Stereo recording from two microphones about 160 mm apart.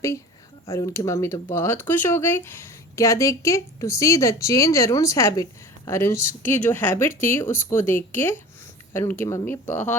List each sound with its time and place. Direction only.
0.7 s speech: 20° left (ahead or behind)